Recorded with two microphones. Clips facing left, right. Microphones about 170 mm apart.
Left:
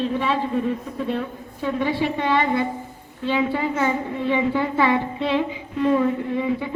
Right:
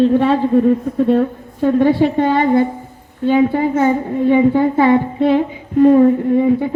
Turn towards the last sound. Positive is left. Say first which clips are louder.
# right 10 dB
turn(degrees=-45)  # may be behind; listen again after turning